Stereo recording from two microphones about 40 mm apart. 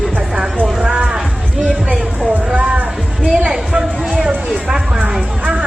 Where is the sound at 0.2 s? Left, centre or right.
Centre.